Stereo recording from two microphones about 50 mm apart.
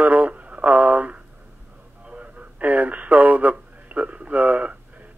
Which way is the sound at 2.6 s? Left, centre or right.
Right.